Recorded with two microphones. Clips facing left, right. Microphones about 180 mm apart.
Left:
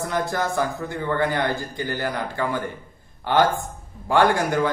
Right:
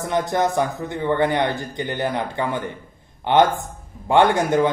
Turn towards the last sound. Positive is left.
turn(degrees=-20)  # may be behind; listen again after turning